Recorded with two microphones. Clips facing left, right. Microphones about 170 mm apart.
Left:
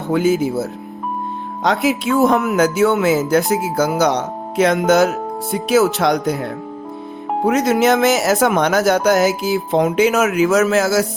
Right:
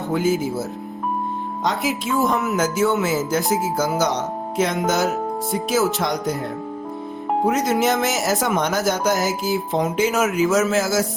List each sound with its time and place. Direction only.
0.1 s speech: 70° left (ahead or behind)
1.6 s speech: 70° left (ahead or behind)